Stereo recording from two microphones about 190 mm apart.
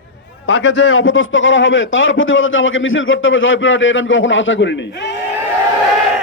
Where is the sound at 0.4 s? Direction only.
80° left.